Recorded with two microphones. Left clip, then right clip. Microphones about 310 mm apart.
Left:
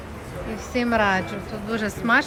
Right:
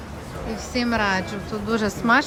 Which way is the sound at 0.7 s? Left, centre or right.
Centre.